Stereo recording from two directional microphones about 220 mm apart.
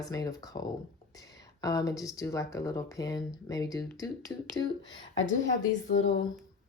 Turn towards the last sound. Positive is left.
turn(degrees=40)  # may be behind; listen again after turning